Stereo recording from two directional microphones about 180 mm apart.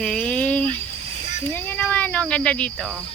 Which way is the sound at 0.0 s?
5° left (ahead or behind).